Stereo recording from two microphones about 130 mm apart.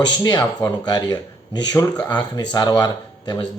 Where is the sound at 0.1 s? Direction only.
30° left (ahead or behind).